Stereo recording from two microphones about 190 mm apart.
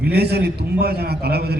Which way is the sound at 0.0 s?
60° right (ahead or behind).